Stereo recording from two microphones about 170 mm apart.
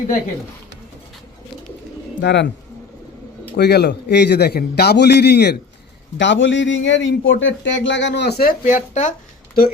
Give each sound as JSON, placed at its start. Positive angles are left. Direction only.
{"t": 2.1, "sound": "speech", "side_deg": 90}
{"t": 3.5, "sound": "a man's voice", "side_deg": 80}
{"t": 6.1, "sound": "speech", "side_deg": 90}